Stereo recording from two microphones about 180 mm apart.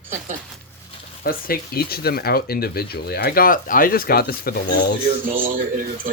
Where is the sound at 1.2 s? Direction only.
55° left (ahead or behind).